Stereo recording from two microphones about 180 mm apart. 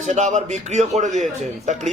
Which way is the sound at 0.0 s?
40° right (ahead or behind).